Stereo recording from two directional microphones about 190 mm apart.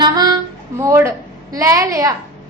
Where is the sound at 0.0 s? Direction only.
20° right (ahead or behind).